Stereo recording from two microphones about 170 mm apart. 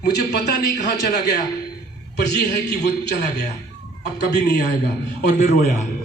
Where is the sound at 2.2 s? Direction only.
75° left (ahead or behind).